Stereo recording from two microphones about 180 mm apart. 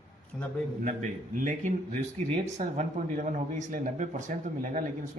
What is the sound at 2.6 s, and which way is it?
A man's voice, 45° right (ahead or behind).